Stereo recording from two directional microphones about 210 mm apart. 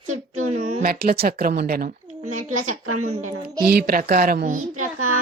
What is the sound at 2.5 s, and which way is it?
Speech, 90° right.